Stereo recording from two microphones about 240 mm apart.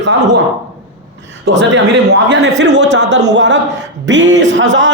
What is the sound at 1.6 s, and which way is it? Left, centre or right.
A man's voice, right.